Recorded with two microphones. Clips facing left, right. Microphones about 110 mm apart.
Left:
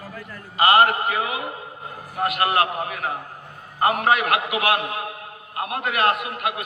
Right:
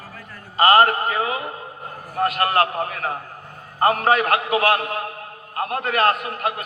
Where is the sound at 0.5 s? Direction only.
35° right (ahead or behind).